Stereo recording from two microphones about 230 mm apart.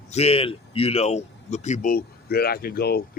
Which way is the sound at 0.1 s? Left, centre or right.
Left.